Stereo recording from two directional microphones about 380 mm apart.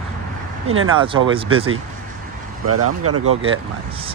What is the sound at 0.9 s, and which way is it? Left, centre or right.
Speech, centre.